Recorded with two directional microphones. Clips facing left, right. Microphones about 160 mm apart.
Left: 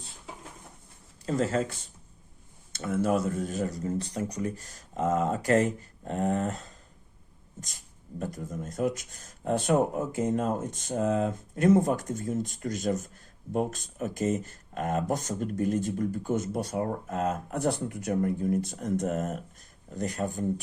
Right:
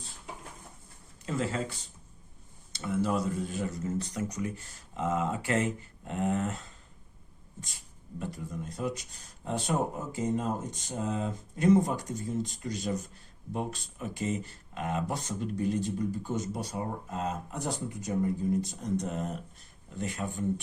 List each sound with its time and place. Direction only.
1.2 s speech: 40° left (ahead or behind)
2.7 s speech: 50° left (ahead or behind)
8.2 s speech: 45° left (ahead or behind)